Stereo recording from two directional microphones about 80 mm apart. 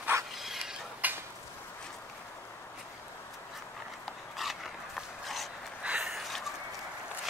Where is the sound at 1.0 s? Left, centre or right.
Right.